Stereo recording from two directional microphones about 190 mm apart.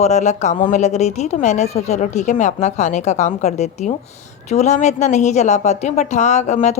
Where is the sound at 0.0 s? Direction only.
35° left (ahead or behind).